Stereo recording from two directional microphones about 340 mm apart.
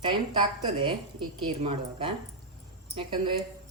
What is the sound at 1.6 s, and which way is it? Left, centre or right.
A woman's voice, centre.